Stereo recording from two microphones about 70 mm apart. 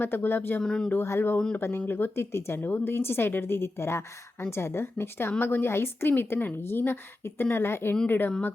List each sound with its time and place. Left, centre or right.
0.0 s speech: left
0.6 s speech: centre
1.0 s speech: left